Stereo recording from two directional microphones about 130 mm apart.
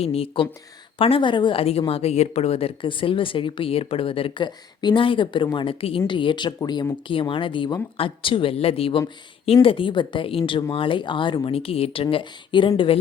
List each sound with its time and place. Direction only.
0.0 s a woman's voice: 50° left (ahead or behind)